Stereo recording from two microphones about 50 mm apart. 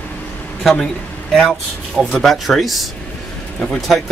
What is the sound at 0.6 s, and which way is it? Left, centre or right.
Speech, centre.